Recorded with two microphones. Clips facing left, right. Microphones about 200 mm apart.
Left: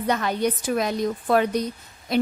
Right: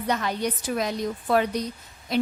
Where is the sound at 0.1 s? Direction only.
55° left (ahead or behind).